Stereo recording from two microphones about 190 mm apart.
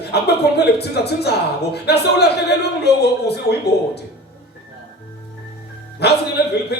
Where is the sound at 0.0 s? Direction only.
60° left (ahead or behind).